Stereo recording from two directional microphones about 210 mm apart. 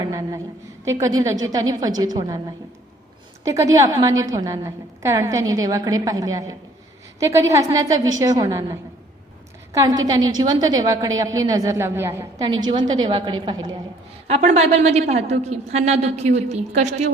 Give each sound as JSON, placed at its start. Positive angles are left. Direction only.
{"t": 0.0, "sound": "a sound", "side_deg": -15}
{"t": 0.9, "sound": "a woman's voice", "side_deg": -15}
{"t": 3.4, "sound": "a woman's voice", "side_deg": -15}
{"t": 14.3, "sound": "a woman's voice", "side_deg": -30}